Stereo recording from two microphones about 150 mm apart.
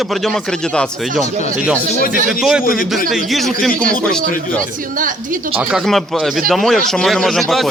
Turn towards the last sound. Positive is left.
turn(degrees=0)  # may be behind; listen again after turning